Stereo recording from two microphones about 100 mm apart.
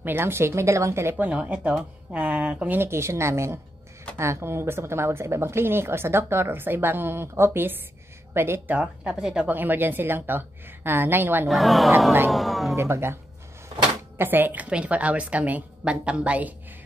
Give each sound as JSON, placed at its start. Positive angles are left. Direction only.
{"t": 0.0, "sound": "a woman's voice", "side_deg": -20}
{"t": 9.5, "sound": "speech", "side_deg": -20}
{"t": 11.4, "sound": "speech", "side_deg": 0}
{"t": 12.3, "sound": "a sound", "side_deg": 0}
{"t": 12.7, "sound": "a woman's voice", "side_deg": -25}